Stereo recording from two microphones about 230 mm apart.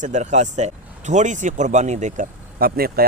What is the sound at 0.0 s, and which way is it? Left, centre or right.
Speech, right.